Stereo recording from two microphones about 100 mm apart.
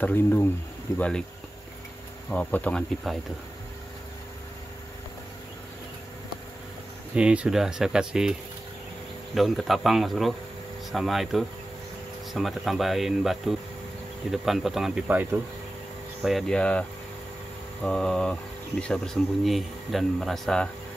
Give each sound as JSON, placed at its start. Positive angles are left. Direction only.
{"t": 0.0, "sound": "speech", "side_deg": 20}
{"t": 2.2, "sound": "speech", "side_deg": 15}
{"t": 3.1, "sound": "speech", "side_deg": 0}
{"t": 7.2, "sound": "speech", "side_deg": -10}
{"t": 16.2, "sound": "speech", "side_deg": 0}
{"t": 17.8, "sound": "speech", "side_deg": 5}